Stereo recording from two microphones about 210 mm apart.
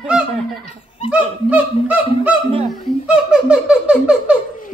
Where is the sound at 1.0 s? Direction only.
5° right (ahead or behind).